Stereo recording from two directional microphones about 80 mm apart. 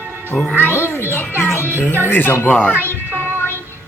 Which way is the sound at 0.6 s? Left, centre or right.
Left.